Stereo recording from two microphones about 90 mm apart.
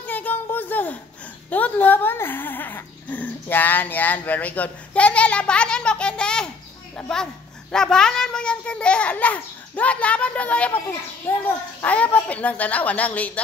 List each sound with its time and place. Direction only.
0.0 s a sound: 20° left (ahead or behind)
1.5 s speech: 20° left (ahead or behind)
7.7 s a child's voice: 5° left (ahead or behind)